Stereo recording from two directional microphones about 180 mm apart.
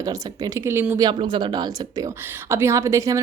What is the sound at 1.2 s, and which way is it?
Speech, 25° right (ahead or behind).